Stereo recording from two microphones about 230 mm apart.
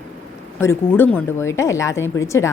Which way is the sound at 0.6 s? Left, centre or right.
Centre.